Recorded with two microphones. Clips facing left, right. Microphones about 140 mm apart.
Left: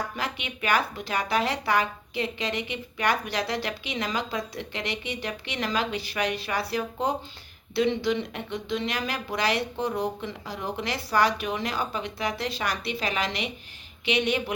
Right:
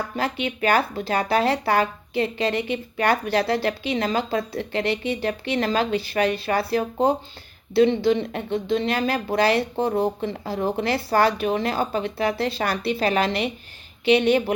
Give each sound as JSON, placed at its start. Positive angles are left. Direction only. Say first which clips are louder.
{"t": 0.2, "sound": "speech", "louder": "right 8 dB", "side_deg": -35}